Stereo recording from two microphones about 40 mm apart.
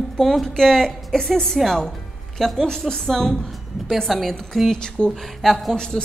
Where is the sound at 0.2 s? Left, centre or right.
Centre.